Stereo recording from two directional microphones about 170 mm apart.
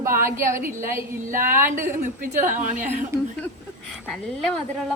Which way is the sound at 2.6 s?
45° right (ahead or behind).